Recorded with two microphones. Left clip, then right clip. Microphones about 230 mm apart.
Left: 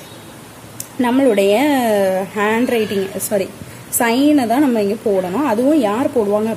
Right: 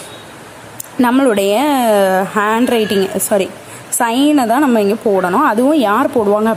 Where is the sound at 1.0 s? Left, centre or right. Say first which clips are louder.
Right 1 dB; right.